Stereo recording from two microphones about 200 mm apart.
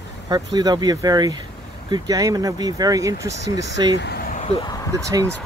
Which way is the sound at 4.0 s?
50° left (ahead or behind).